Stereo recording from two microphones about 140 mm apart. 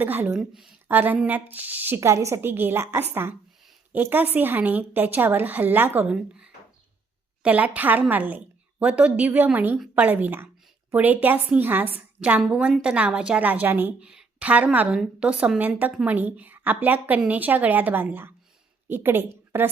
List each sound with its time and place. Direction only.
0.0 s a woman's voice: 15° right (ahead or behind)